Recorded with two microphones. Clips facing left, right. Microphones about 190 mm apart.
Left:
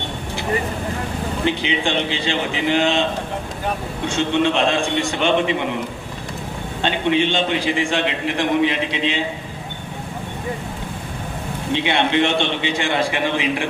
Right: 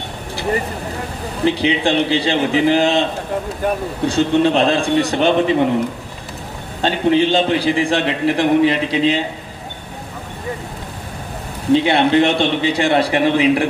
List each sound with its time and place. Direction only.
1.5 s a man's voice: 35° right (ahead or behind)
4.0 s a man's voice: 35° right (ahead or behind)
6.8 s a man's voice: 35° right (ahead or behind)
11.7 s a man's voice: 35° right (ahead or behind)